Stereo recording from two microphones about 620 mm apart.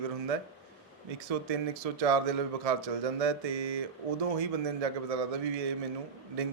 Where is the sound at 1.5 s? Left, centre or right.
Right.